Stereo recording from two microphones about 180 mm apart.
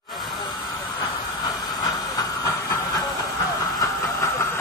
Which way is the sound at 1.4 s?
20° left (ahead or behind).